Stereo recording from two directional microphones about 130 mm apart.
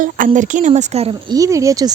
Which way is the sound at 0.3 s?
75° right (ahead or behind).